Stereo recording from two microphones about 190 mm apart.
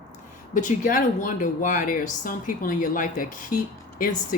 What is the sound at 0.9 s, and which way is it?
Speech, 45° left (ahead or behind).